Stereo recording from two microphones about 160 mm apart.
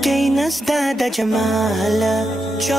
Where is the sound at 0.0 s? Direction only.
Centre (ahead or behind).